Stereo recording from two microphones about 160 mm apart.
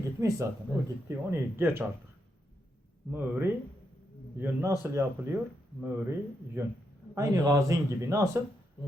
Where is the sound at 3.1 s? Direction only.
10° right (ahead or behind).